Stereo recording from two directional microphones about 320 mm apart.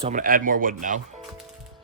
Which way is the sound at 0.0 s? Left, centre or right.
Right.